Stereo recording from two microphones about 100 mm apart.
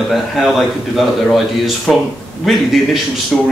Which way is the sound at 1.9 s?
5° left (ahead or behind).